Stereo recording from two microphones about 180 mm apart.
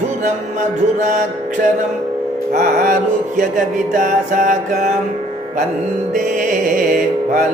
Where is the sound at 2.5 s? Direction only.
50° right (ahead or behind).